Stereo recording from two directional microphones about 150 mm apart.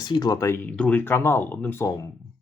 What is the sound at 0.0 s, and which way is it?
Speech, 25° left (ahead or behind).